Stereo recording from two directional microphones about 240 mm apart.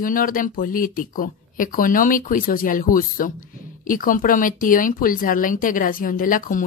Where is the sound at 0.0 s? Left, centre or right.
Left.